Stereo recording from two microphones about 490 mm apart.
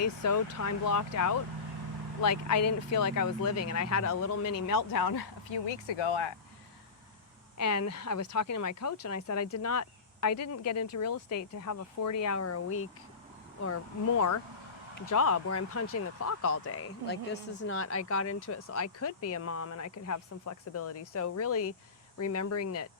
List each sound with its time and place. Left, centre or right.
0.0 s speech: left
4.7 s speech: left
7.6 s speech: left